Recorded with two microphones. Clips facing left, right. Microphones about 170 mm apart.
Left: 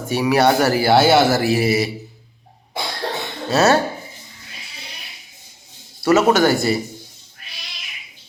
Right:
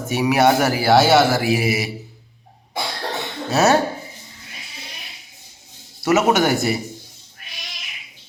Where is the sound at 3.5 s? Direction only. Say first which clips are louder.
Left 1 dB; 20° right (ahead or behind).